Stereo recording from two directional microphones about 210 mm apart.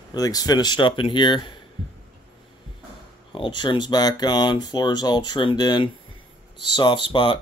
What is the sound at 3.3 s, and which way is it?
Speech, 20° left (ahead or behind).